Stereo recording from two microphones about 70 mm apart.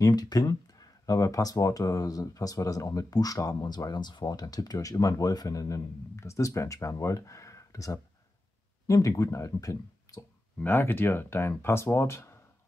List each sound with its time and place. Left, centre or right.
0.0 s speech: left
4.7 s speech: left
10.6 s speech: left